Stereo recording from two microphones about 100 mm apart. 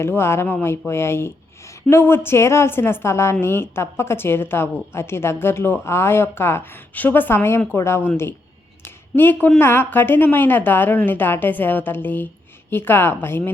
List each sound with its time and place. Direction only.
0.0 s a woman's voice: 25° left (ahead or behind)
8.8 s a sound: 20° left (ahead or behind)
9.6 s a woman's voice: 25° left (ahead or behind)